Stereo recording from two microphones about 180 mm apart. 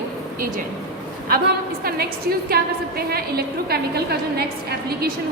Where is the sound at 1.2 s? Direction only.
55° right (ahead or behind).